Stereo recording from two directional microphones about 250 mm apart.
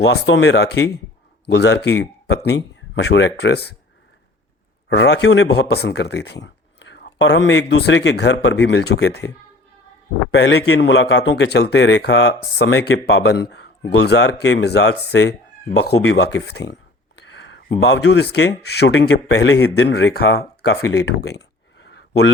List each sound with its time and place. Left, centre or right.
0.0 s speech: left
4.9 s speech: left
10.3 s speech: left
20.6 s a sound: left